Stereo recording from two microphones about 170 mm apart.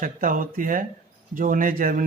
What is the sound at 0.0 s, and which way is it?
Speech, 50° right (ahead or behind).